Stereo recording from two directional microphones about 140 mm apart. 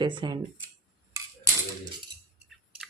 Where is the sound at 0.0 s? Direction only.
35° right (ahead or behind).